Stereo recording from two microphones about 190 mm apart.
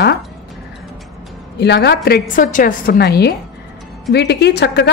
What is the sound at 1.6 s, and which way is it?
Speech, 60° left (ahead or behind).